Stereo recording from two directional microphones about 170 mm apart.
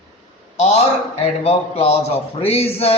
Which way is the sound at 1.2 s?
35° left (ahead or behind).